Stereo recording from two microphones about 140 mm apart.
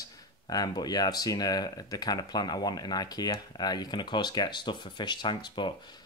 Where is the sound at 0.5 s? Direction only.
30° left (ahead or behind).